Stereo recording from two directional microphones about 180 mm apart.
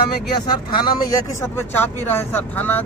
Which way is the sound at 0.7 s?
20° left (ahead or behind).